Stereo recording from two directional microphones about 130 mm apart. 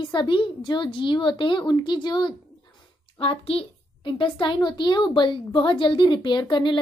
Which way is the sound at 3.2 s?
45° left (ahead or behind).